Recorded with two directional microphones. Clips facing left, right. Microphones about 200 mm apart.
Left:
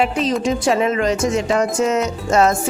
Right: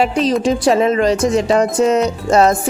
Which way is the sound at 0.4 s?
35° right (ahead or behind).